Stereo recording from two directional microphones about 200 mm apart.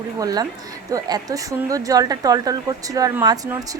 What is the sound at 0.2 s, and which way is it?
Speech, 20° right (ahead or behind).